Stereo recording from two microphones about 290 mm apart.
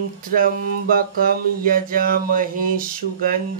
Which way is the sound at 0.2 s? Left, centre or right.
Right.